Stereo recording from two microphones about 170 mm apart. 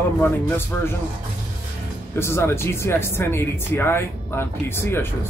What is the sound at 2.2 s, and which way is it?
Speech, 15° left (ahead or behind).